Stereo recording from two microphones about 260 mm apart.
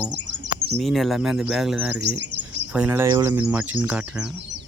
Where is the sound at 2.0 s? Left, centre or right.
Right.